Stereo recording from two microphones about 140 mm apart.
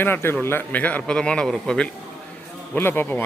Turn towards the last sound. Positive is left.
turn(degrees=15)  # may be behind; listen again after turning